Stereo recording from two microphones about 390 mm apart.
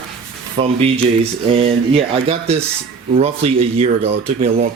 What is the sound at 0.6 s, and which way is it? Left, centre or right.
Speech, centre.